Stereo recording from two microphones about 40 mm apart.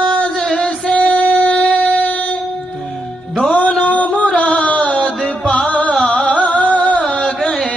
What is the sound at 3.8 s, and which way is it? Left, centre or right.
Music, left.